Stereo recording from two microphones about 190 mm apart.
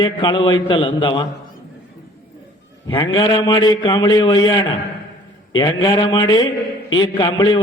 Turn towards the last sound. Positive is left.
turn(degrees=20)  # may be behind; listen again after turning